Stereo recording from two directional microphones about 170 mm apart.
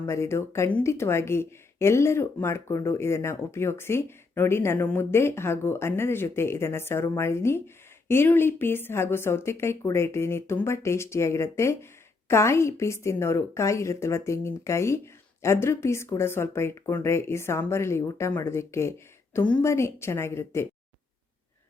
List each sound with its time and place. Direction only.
0.1 s speech: 15° left (ahead or behind)